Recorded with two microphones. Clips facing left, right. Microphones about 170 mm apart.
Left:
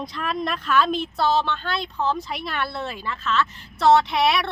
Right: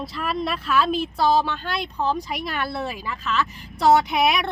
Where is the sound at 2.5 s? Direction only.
Centre (ahead or behind).